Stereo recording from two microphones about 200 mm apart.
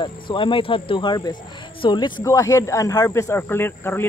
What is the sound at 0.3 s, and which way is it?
Speech, 25° left (ahead or behind).